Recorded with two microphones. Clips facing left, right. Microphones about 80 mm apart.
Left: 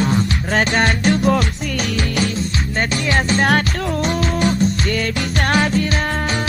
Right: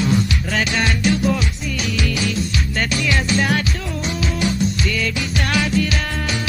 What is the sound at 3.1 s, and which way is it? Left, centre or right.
Music, left.